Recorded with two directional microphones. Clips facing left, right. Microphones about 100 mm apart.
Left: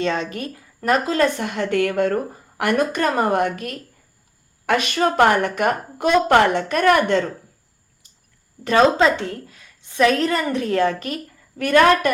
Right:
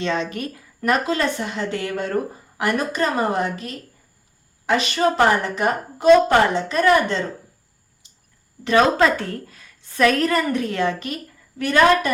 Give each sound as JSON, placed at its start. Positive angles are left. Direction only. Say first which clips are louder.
{"t": 0.0, "sound": "a woman's voice", "louder": "left 1 dB", "side_deg": 40}
{"t": 9.0, "sound": "a woman's voice", "louder": "left 1 dB", "side_deg": 25}